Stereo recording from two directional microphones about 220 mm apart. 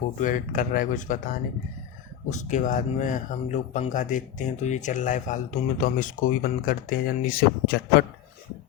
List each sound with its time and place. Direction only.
0.2 s speech: 35° left (ahead or behind)